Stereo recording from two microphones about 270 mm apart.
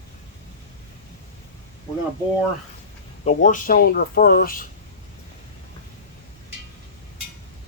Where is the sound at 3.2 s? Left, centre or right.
Left.